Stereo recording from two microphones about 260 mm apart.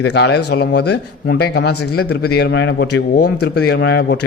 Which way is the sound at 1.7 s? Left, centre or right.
Left.